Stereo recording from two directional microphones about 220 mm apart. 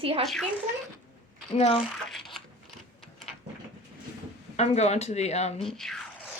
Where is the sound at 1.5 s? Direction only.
30° left (ahead or behind).